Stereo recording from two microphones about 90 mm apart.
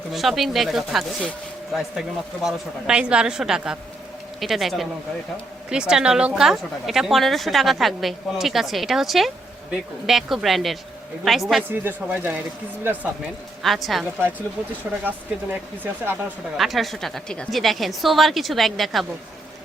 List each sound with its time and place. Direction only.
0.1 s a woman's voice: centre (ahead or behind)
11.7 s speech: 20° right (ahead or behind)
13.6 s a woman's voice: centre (ahead or behind)
14.0 s speech: 20° right (ahead or behind)
16.6 s a woman's voice: centre (ahead or behind)